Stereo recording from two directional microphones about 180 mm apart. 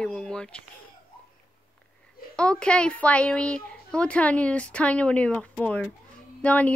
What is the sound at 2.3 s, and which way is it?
A woman's voice, 5° left (ahead or behind).